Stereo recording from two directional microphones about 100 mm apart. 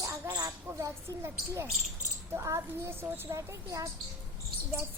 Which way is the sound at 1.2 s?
25° right (ahead or behind).